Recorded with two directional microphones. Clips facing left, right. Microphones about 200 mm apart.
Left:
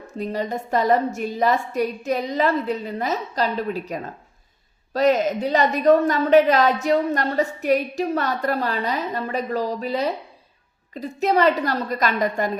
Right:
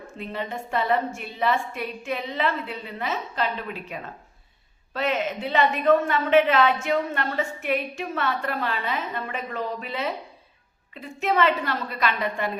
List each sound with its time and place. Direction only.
0.1 s a woman's voice: 40° left (ahead or behind)